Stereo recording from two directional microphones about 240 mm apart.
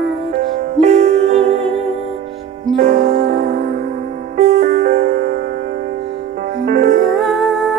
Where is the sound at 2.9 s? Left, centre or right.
Right.